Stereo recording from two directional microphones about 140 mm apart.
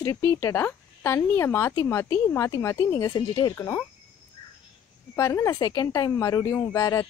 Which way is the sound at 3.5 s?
15° left (ahead or behind).